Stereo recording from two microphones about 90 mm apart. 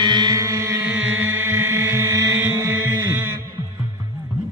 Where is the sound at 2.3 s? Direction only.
20° right (ahead or behind).